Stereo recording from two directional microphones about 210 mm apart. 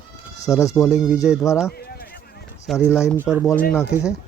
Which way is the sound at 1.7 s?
45° left (ahead or behind).